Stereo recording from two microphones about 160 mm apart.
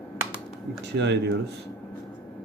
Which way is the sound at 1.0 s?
90° right.